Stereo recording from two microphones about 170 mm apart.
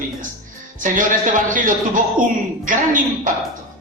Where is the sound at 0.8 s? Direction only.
50° right (ahead or behind).